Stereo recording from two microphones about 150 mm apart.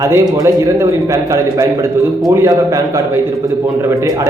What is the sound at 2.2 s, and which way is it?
Speech, 20° right (ahead or behind).